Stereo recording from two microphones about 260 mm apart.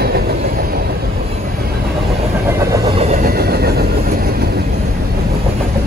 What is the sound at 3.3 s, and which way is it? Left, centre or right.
Vehicle, right.